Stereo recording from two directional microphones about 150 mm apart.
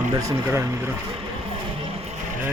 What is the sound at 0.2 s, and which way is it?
Speech, 20° right (ahead or behind).